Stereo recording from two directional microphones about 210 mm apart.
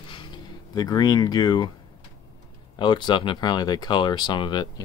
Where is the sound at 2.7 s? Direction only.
20° left (ahead or behind).